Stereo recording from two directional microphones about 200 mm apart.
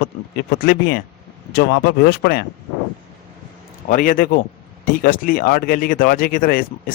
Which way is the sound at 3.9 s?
45° left (ahead or behind).